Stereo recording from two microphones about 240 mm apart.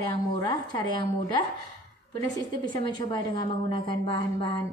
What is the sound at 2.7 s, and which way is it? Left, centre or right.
A woman's voice, centre.